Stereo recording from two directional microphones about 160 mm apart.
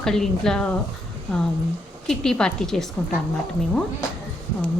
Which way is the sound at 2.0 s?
5° left (ahead or behind).